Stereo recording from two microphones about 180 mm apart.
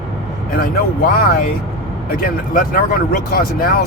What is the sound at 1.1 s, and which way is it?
Speech, 55° left (ahead or behind).